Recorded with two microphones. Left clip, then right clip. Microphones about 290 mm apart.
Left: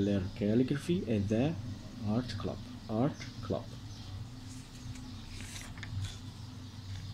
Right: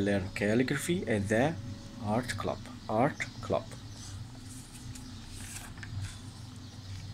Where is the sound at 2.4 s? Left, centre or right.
Right.